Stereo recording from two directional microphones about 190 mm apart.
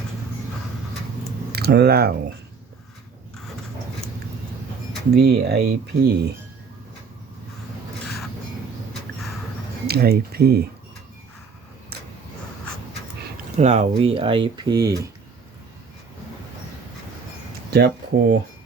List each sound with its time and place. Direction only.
1.5 s speech: 55° right (ahead or behind)
5.1 s speech: 55° right (ahead or behind)
9.8 s speech: 55° right (ahead or behind)
13.3 s speech: 35° right (ahead or behind); by 15.1 s 20° right (ahead or behind)
17.7 s speech: 55° right (ahead or behind)